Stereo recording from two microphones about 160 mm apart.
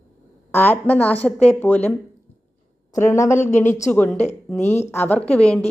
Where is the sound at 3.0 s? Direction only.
15° left (ahead or behind).